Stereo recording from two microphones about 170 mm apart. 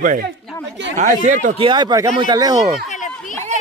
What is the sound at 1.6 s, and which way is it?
Speech, 25° right (ahead or behind).